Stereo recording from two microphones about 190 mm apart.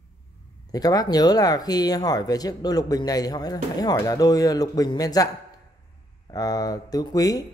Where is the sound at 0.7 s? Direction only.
20° left (ahead or behind).